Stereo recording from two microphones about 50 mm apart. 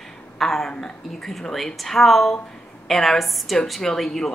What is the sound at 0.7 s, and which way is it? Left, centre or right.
Speech, centre.